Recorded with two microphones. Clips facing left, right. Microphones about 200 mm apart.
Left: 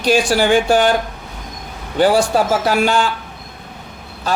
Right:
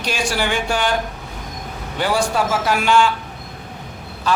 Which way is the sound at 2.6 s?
35° left (ahead or behind).